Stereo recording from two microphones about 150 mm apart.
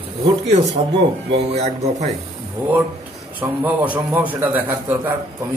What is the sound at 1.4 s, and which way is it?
Speech, 45° right (ahead or behind).